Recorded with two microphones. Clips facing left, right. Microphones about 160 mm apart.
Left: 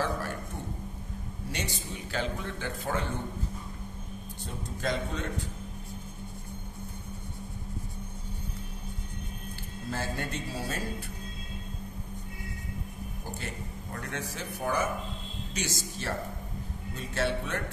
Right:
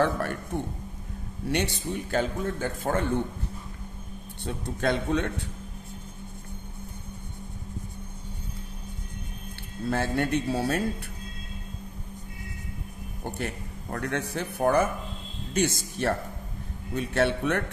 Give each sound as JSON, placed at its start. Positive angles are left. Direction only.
{"t": 0.0, "sound": "a man's voice", "side_deg": -60}
{"t": 1.5, "sound": "a man's voice", "side_deg": -65}
{"t": 4.5, "sound": "a man's voice", "side_deg": -65}
{"t": 9.8, "sound": "a man's voice", "side_deg": -65}
{"t": 13.2, "sound": "a man's voice", "side_deg": -65}